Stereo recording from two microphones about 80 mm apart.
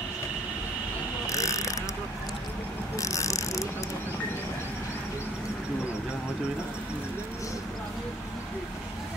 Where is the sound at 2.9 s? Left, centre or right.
Left.